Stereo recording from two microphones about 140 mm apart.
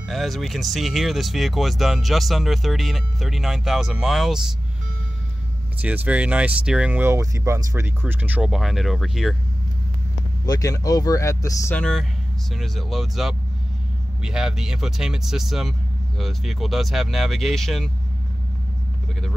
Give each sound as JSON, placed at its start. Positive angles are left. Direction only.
{"t": 0.1, "sound": "speech", "side_deg": 0}
{"t": 5.8, "sound": "speech", "side_deg": -10}
{"t": 10.4, "sound": "speech", "side_deg": 25}
{"t": 11.7, "sound": "speech", "side_deg": 5}